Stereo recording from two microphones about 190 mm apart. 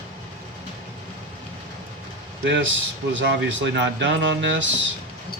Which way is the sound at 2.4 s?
70° right (ahead or behind).